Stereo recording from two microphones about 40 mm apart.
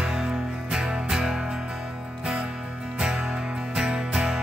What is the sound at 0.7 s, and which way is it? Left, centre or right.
Music, right.